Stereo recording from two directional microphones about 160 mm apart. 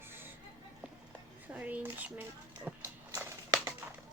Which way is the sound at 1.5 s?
10° right (ahead or behind).